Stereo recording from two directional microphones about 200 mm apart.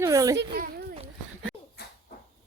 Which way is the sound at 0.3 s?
50° right (ahead or behind).